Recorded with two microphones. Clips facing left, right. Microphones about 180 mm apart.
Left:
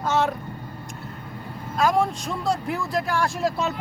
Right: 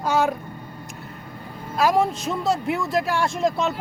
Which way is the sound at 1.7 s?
5° right (ahead or behind).